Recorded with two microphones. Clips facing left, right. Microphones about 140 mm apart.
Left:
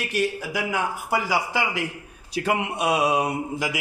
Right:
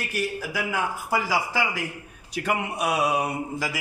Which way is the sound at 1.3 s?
20° left (ahead or behind).